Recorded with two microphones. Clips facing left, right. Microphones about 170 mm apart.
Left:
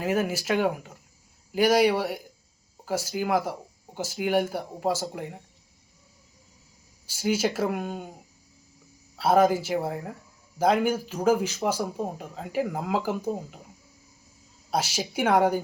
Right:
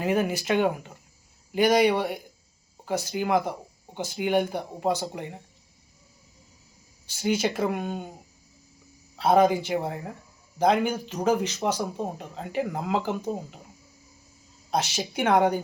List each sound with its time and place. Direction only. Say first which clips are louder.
0.0 s speech: right 1 dB; 5° left (ahead or behind)
7.1 s speech: even; 5° left (ahead or behind)
9.1 s speech: right 1 dB; 5° left (ahead or behind)
14.7 s speech: right 1 dB; 10° left (ahead or behind)